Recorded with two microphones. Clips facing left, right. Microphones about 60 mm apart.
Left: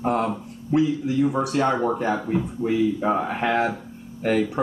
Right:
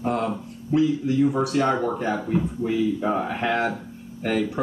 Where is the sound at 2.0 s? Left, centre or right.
Left.